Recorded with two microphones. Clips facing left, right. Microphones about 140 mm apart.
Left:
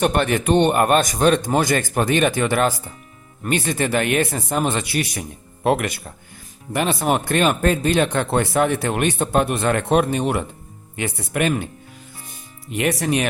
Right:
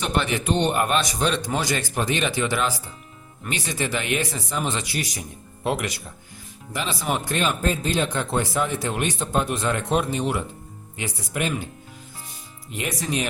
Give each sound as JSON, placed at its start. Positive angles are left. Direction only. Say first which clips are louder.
{"t": 0.0, "sound": "speech", "louder": "left 6 dB", "side_deg": 50}
{"t": 12.7, "sound": "speech", "louder": "left 7 dB", "side_deg": 65}